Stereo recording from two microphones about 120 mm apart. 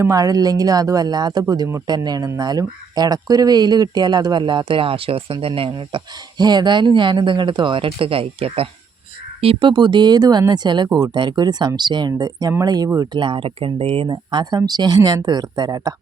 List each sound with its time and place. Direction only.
0.0 s speech: 30° right (ahead or behind)